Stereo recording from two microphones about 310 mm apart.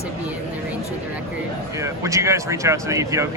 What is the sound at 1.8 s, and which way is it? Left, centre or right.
Speech, centre.